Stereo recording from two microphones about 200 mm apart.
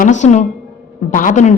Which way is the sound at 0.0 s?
35° left (ahead or behind).